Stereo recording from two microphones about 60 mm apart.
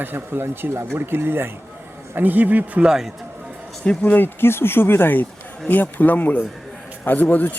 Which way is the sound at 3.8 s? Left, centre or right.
Centre.